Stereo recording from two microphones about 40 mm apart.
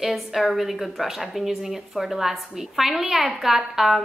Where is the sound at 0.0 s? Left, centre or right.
Centre.